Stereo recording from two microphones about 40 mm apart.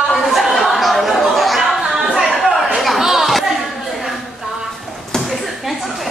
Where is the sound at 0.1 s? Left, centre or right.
Centre.